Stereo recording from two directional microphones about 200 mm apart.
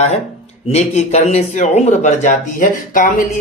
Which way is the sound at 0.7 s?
35° left (ahead or behind).